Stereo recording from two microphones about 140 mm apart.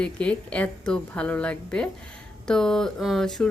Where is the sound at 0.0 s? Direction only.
10° left (ahead or behind).